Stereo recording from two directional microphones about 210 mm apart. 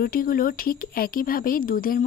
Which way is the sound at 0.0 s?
45° left (ahead or behind).